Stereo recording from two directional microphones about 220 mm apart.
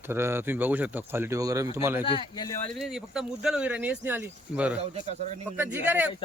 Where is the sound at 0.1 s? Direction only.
10° right (ahead or behind).